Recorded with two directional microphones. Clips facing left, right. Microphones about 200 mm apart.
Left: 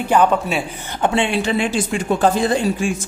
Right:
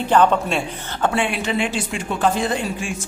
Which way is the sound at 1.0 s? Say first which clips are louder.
Left 3 dB; 25° left (ahead or behind).